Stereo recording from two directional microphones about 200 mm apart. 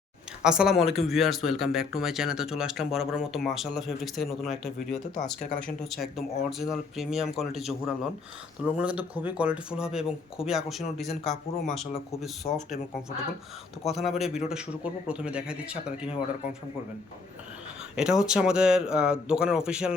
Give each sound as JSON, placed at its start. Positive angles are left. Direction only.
{"t": 0.4, "sound": "speech", "side_deg": -5}
{"t": 12.4, "sound": "speech", "side_deg": 40}
{"t": 13.8, "sound": "speech", "side_deg": 0}
{"t": 17.9, "sound": "speech", "side_deg": -5}